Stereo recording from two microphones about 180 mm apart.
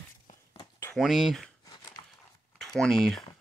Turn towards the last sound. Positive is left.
turn(degrees=0)  # may be behind; listen again after turning